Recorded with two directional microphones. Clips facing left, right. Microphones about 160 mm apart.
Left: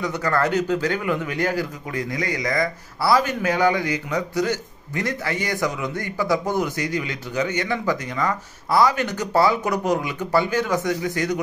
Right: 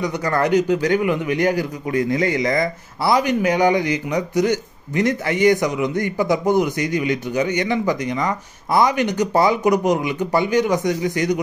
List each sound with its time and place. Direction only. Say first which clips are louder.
0.0 s a man's voice: right 2 dB; 15° right (ahead or behind)